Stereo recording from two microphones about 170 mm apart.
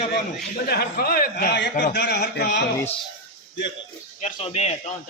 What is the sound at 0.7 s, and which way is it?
A man's voice, 65° left (ahead or behind).